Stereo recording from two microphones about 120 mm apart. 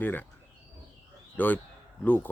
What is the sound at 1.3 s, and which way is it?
Speech, 15° left (ahead or behind).